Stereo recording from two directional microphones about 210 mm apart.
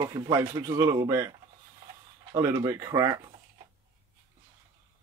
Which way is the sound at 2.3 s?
15° right (ahead or behind).